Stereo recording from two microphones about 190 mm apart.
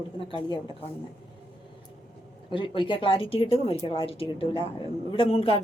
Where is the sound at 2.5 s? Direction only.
25° left (ahead or behind).